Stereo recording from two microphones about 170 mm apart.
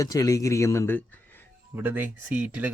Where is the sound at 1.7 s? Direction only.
10° right (ahead or behind).